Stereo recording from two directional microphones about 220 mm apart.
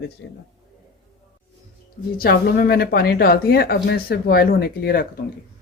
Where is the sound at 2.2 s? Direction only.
45° left (ahead or behind).